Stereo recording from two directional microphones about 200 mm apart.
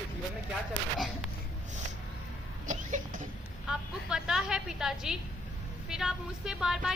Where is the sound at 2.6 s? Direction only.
40° right (ahead or behind).